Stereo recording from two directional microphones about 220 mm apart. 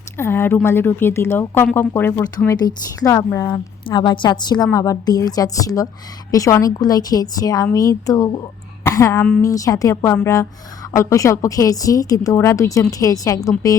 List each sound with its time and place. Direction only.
0.2 s speech: 10° left (ahead or behind)